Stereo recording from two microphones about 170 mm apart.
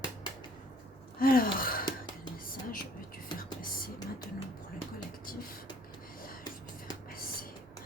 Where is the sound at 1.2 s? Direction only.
60° left (ahead or behind).